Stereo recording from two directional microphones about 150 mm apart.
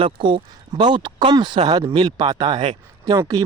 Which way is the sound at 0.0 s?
35° right (ahead or behind).